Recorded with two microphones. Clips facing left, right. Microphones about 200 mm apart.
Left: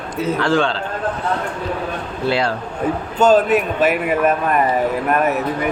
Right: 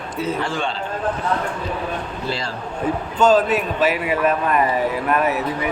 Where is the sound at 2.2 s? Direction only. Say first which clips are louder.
Left 9 dB; 65° left (ahead or behind).